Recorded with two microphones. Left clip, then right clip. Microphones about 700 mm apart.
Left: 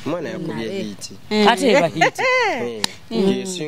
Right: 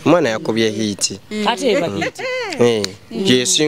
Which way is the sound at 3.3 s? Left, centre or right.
Right.